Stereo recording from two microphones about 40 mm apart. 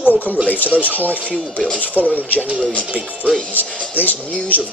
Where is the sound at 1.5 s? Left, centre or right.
Left.